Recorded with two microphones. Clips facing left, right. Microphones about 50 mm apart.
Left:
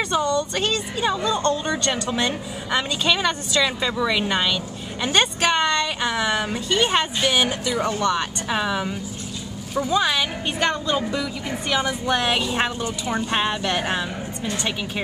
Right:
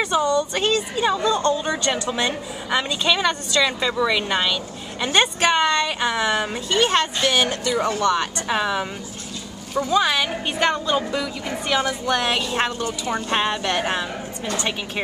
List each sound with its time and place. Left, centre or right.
0.0 s a woman's voice: centre
6.7 s speech: centre
11.8 s speech: centre